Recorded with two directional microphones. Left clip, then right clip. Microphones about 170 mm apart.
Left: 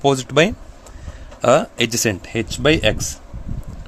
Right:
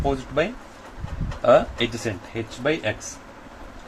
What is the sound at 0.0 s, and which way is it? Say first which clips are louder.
Speech: left 8 dB; 90° left.